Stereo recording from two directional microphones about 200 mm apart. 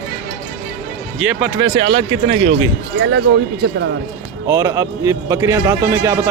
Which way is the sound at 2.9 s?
60° right (ahead or behind).